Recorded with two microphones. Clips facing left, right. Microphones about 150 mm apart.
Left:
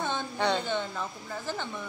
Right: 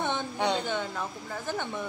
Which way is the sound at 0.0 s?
15° right (ahead or behind).